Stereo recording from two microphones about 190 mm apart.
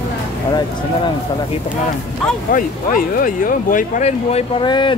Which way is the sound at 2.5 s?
45° left (ahead or behind).